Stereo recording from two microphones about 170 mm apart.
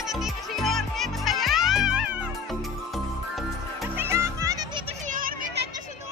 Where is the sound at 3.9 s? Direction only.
15° right (ahead or behind).